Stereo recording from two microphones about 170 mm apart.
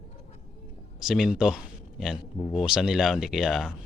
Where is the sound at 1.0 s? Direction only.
Centre (ahead or behind).